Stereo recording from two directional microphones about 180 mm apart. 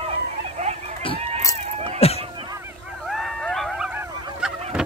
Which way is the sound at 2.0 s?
35° left (ahead or behind).